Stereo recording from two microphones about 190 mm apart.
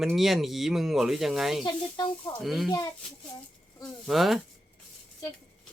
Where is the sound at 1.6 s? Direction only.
20° left (ahead or behind).